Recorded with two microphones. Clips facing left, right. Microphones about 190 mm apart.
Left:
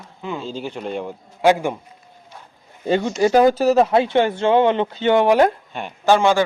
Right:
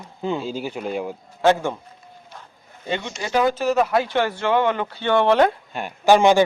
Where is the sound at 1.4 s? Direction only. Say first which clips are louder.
Left 2 dB; 15° left (ahead or behind).